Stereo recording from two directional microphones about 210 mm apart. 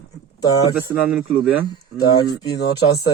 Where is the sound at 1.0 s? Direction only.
5° right (ahead or behind).